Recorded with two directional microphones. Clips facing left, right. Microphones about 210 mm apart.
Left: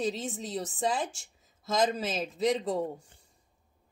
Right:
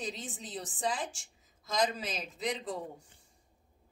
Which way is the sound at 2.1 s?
45° left (ahead or behind).